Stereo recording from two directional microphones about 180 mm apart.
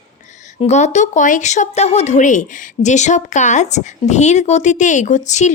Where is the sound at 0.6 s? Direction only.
40° left (ahead or behind).